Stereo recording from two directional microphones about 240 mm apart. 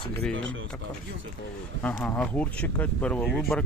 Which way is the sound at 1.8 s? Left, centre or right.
Centre.